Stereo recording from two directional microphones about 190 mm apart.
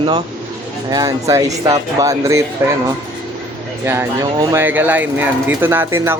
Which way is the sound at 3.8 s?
10° right (ahead or behind).